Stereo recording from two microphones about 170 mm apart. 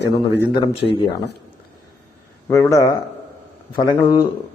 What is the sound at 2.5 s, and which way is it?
A man's voice, 20° left (ahead or behind).